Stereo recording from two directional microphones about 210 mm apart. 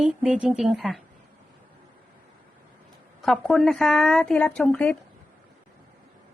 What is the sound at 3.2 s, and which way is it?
A woman's voice, centre (ahead or behind).